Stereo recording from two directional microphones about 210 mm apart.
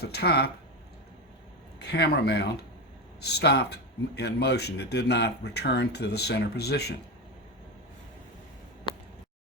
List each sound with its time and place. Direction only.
0.0 s speech: 50° left (ahead or behind)
1.8 s speech: 50° left (ahead or behind)
8.9 s a sound: 25° left (ahead or behind)